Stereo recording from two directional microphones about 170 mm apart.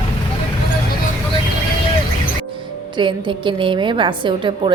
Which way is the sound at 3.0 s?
30° right (ahead or behind).